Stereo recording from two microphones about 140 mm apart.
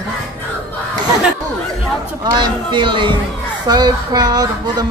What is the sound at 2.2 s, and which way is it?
Speech, 30° right (ahead or behind).